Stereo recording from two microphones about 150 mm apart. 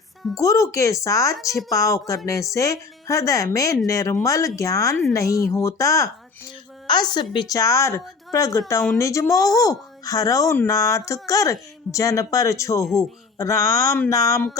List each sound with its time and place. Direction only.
0.3 s speech: 20° left (ahead or behind)
12.8 s speech: centre (ahead or behind)
13.4 s speech: 20° left (ahead or behind)